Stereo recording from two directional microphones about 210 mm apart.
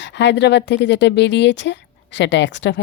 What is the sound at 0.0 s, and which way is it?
Speech, 55° left (ahead or behind).